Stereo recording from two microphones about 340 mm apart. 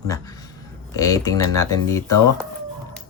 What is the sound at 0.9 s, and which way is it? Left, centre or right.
Speech, centre.